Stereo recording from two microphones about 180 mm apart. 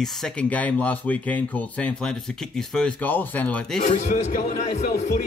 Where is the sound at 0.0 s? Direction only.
5° left (ahead or behind).